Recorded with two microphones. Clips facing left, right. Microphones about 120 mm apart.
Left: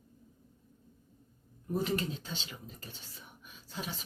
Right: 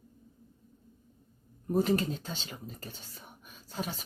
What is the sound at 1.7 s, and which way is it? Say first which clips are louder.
Speech: right 5 dB; 45° right (ahead or behind).